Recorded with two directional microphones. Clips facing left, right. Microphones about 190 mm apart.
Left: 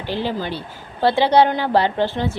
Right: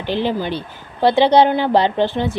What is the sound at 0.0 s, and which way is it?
A woman's voice, 20° right (ahead or behind).